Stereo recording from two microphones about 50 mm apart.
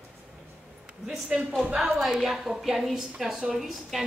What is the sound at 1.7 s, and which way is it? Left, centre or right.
A woman's voice, centre.